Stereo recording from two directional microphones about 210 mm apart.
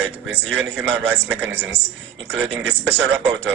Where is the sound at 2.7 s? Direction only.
55° right (ahead or behind).